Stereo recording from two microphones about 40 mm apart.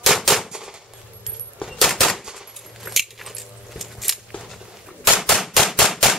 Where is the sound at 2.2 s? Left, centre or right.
Centre.